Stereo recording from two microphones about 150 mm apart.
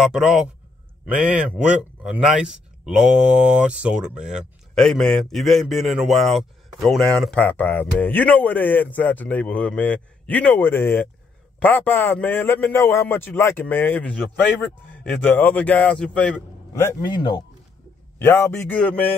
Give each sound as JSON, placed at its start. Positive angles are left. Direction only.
{"t": 0.0, "sound": "a man's voice", "side_deg": -5}
{"t": 17.0, "sound": "speech", "side_deg": 30}
{"t": 18.2, "sound": "a man's voice", "side_deg": 15}